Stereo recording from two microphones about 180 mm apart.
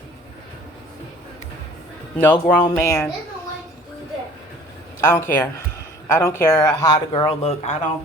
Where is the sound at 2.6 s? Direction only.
20° left (ahead or behind).